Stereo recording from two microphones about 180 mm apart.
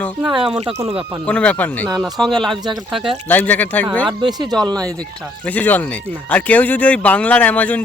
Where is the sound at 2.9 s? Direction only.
Centre (ahead or behind).